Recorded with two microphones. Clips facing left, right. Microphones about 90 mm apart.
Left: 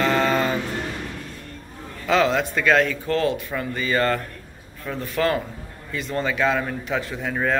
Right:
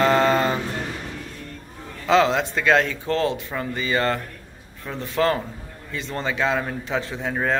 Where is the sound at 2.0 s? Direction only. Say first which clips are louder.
Right 1 dB; 25° right (ahead or behind).